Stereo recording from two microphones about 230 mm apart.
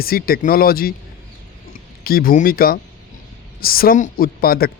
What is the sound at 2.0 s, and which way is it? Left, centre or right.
Speech, left.